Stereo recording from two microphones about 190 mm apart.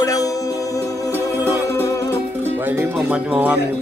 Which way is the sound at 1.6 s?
15° left (ahead or behind).